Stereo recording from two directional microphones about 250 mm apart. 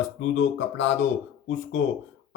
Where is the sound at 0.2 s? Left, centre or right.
Left.